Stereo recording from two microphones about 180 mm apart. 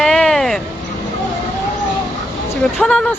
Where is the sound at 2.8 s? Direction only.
5° left (ahead or behind).